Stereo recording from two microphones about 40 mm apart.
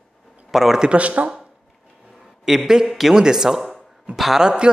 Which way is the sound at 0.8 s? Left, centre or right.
Right.